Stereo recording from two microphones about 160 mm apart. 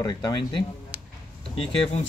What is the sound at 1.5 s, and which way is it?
Speech, 45° left (ahead or behind).